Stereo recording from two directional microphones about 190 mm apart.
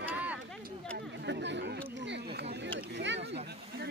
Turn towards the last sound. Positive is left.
turn(degrees=-70)  # may be behind; listen again after turning